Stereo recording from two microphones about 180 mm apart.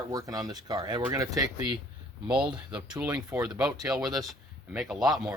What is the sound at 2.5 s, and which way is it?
Speech, 5° right (ahead or behind).